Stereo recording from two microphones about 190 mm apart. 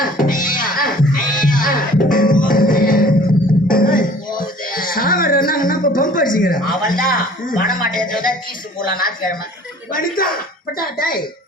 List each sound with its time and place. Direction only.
0.0 s music: 45° left (ahead or behind)
8.8 s speech: 50° left (ahead or behind)